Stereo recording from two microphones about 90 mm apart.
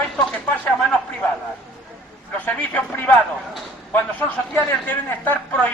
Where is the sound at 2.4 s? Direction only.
15° left (ahead or behind).